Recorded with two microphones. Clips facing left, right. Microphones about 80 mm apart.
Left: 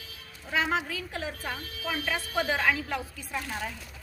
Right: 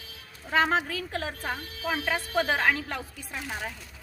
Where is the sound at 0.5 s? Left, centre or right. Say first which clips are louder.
Right 4 dB; right.